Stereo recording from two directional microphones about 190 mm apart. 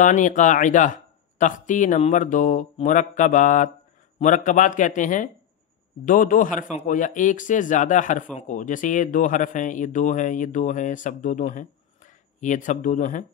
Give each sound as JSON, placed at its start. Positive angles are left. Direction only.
{"t": 0.0, "sound": "a man's voice", "side_deg": 40}